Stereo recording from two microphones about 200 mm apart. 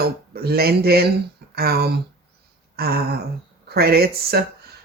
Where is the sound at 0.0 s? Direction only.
50° right (ahead or behind).